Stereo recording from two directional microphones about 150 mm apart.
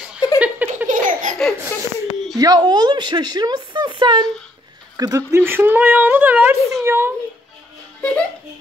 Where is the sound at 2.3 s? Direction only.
25° right (ahead or behind).